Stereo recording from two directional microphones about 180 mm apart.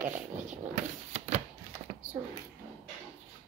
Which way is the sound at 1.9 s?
40° right (ahead or behind).